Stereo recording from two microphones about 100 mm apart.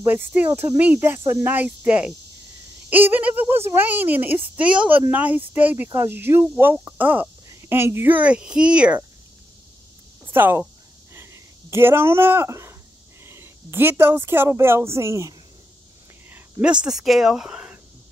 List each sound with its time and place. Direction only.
0.0 s speech: 20° right (ahead or behind)
10.2 s speech: 20° right (ahead or behind)
11.1 s a sound: 25° right (ahead or behind)
13.2 s speech: 25° right (ahead or behind)
16.6 s speech: 10° right (ahead or behind)